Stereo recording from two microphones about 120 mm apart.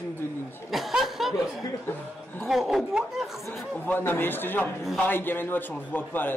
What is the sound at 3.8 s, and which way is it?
A man's voice, 15° left (ahead or behind).